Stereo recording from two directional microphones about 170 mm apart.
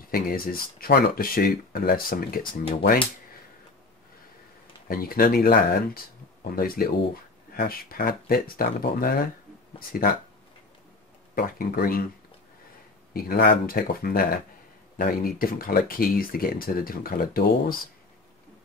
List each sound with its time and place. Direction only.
0.1 s speech: 60° left (ahead or behind)
4.8 s speech: 60° left (ahead or behind)
11.3 s speech: 60° left (ahead or behind)
13.1 s speech: 60° left (ahead or behind)